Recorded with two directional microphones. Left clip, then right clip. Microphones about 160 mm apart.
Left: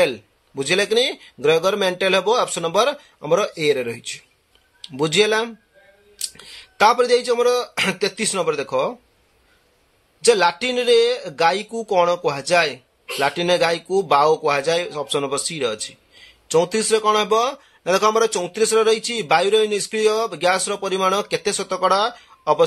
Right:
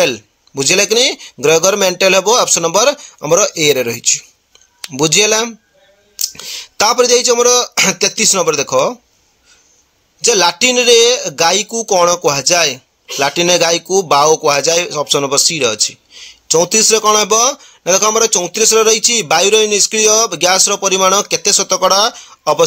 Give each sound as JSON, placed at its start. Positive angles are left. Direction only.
{"t": 0.0, "sound": "speech", "side_deg": -40}
{"t": 10.2, "sound": "speech", "side_deg": -40}